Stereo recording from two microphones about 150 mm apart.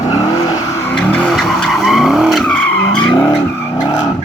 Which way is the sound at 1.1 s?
Centre (ahead or behind).